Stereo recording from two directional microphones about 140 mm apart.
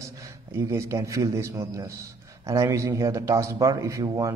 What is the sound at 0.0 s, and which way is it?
A man's voice, 20° right (ahead or behind).